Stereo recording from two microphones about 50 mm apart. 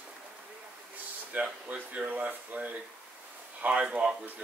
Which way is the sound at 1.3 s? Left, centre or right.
Right.